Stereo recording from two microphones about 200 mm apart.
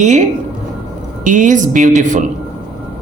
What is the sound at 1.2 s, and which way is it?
Speech, 40° right (ahead or behind).